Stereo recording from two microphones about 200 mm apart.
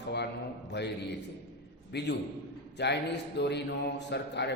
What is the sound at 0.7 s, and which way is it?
A man's voice, 60° left (ahead or behind).